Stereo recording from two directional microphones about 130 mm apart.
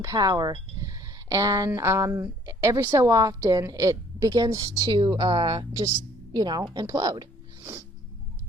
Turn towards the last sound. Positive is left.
turn(degrees=-30)  # may be behind; listen again after turning